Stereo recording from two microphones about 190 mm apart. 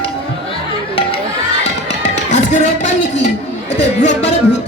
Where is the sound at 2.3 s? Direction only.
40° left (ahead or behind).